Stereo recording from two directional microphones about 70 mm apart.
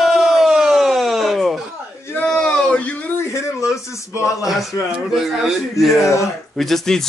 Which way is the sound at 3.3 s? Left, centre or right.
Left.